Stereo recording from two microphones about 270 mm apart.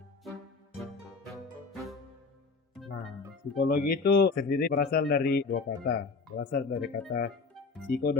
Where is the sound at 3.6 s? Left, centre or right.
Left.